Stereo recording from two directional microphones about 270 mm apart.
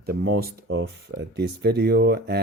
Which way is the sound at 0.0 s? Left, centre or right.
Right.